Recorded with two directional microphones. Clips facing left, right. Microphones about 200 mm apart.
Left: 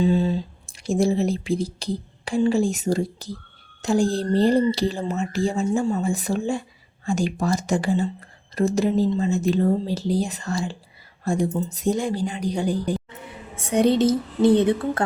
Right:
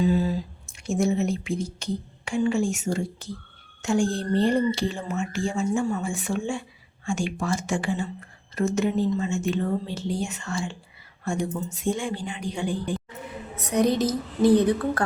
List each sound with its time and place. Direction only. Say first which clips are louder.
0.0 s speech: left 2 dB; 25° left (ahead or behind)
13.6 s a woman's voice: left 4 dB; 30° left (ahead or behind)